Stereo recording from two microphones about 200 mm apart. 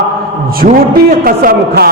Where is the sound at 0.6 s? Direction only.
45° right (ahead or behind).